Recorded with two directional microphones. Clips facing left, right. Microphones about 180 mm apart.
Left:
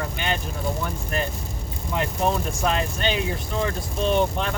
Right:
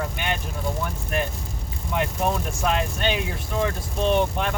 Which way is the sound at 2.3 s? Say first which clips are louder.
Left 1 dB; 5° right (ahead or behind).